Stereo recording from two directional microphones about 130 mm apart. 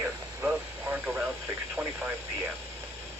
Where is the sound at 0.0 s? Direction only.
15° right (ahead or behind).